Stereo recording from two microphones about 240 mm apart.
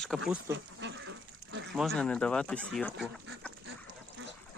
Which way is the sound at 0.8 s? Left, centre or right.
Right.